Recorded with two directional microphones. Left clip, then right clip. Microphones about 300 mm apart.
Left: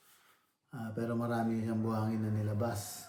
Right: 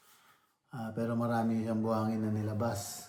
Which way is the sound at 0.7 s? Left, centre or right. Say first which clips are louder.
Right 2 dB; centre.